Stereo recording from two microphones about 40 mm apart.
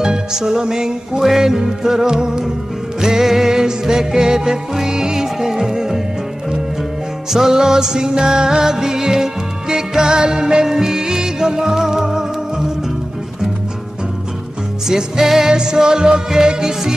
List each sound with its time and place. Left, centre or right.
0.0 s music: centre
7.2 s music: centre
14.9 s music: centre